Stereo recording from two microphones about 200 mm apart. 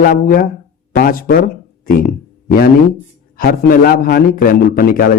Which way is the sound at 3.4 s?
45° left (ahead or behind).